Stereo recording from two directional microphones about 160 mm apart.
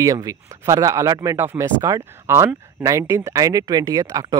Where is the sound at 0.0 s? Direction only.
20° right (ahead or behind).